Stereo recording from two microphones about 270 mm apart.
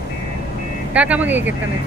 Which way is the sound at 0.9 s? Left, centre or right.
Centre.